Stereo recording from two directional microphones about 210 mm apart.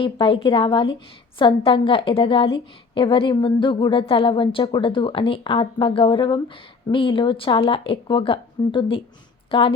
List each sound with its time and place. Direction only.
0.0 s a woman's voice: 25° left (ahead or behind)